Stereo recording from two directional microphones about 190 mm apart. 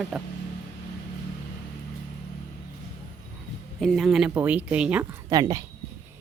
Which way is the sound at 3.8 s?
Centre (ahead or behind).